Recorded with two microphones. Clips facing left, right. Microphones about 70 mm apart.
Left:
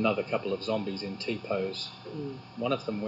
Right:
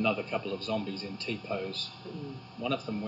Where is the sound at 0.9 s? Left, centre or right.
Centre.